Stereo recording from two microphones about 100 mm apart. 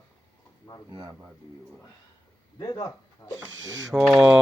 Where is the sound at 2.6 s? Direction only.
45° left (ahead or behind).